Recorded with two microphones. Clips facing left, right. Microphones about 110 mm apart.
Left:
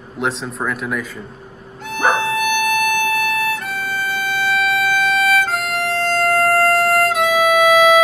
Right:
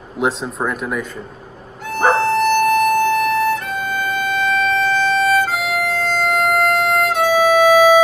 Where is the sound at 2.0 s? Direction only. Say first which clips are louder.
Right 3 dB; 35° right (ahead or behind).